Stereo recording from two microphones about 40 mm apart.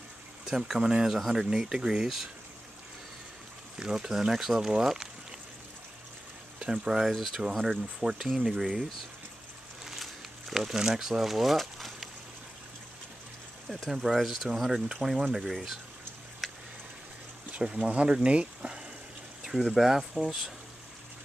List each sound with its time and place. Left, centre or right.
0.5 s speech: centre
3.8 s speech: centre
6.6 s speech: centre
9.8 s a sound: centre
13.8 s speech: centre
14.5 s speech: centre
16.4 s a sound: centre
17.6 s speech: right
19.6 s speech: centre